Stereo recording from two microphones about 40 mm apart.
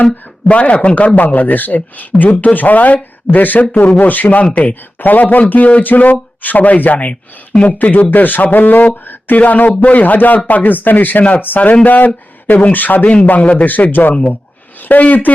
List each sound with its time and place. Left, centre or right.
0.4 s a man's voice: left
9.4 s speech: left
11.3 s speech: left
11.7 s a man's voice: left
13.7 s speech: left